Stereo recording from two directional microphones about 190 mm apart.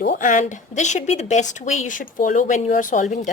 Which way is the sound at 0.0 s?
45° left (ahead or behind).